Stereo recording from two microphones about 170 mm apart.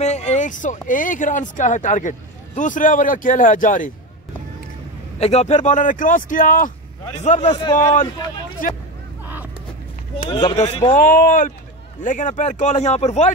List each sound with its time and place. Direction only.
0.0 s speech: 40° left (ahead or behind)
5.2 s speech: 40° left (ahead or behind)
9.2 s vehicle: 10° right (ahead or behind)
10.2 s speech: 25° left (ahead or behind)
10.5 s speech: 40° left (ahead or behind)
11.0 s speech: 55° left (ahead or behind)